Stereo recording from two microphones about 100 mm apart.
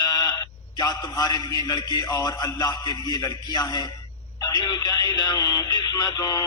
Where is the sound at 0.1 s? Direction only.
40° left (ahead or behind).